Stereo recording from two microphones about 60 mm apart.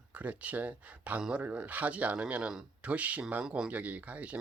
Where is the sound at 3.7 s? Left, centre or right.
Right.